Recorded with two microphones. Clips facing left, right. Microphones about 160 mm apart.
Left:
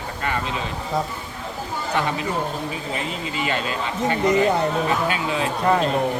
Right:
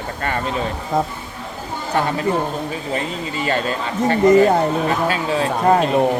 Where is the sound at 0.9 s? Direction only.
50° right (ahead or behind).